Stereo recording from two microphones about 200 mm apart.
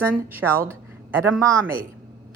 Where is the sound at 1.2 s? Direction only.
15° right (ahead or behind).